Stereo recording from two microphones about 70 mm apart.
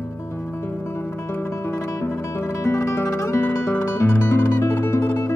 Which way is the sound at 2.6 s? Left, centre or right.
Left.